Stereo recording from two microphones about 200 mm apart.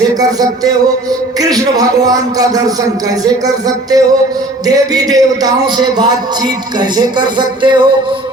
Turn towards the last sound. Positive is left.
turn(degrees=-20)  # may be behind; listen again after turning